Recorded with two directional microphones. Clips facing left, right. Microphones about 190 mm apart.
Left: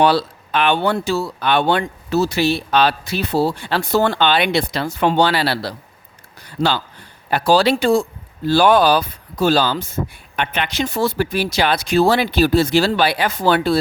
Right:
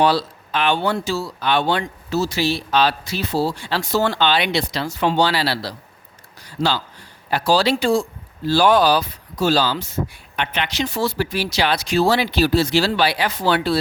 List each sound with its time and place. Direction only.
0.0 s speech: 60° left (ahead or behind)
6.4 s a sound: 60° left (ahead or behind)
7.3 s speech: 55° left (ahead or behind)